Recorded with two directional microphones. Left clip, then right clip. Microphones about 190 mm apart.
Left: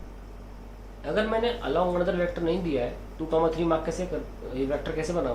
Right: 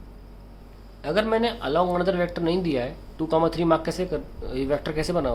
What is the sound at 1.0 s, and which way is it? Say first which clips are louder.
Speech: right 3 dB; 45° right (ahead or behind).